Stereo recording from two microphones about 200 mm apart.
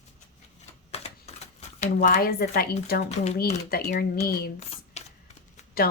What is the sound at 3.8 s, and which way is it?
Speech, 50° left (ahead or behind).